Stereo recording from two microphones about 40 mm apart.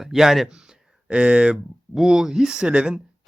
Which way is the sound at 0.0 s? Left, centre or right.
Centre.